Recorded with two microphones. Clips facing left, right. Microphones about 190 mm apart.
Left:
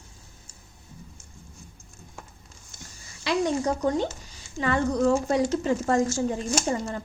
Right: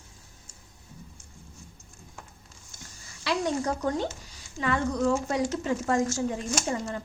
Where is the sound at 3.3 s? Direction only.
20° left (ahead or behind).